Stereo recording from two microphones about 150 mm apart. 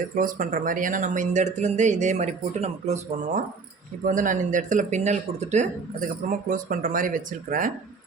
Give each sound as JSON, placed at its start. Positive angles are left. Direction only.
{"t": 0.2, "sound": "speech", "side_deg": -60}
{"t": 6.5, "sound": "speech", "side_deg": -65}